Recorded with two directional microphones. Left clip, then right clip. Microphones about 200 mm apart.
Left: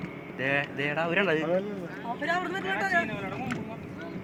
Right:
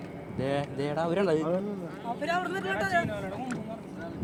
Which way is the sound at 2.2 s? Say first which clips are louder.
Left 1 dB; 20° right (ahead or behind).